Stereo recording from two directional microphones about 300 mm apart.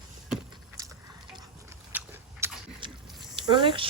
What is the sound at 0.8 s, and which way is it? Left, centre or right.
Water, centre.